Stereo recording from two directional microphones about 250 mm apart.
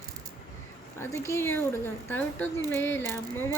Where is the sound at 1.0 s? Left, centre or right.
Centre.